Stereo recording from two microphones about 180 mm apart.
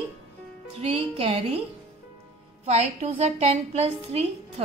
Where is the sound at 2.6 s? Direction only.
40° right (ahead or behind).